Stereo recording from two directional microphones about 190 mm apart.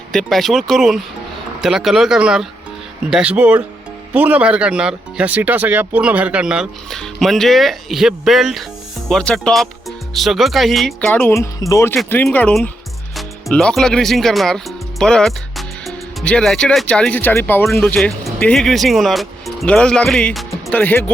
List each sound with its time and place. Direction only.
0.1 s speech: centre (ahead or behind)
17.7 s speech: centre (ahead or behind)